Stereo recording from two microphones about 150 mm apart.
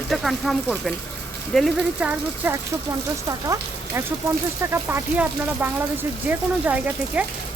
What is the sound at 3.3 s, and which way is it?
Speech, 20° right (ahead or behind).